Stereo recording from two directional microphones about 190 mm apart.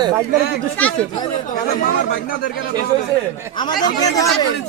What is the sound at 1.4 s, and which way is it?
Speech, 45° left (ahead or behind).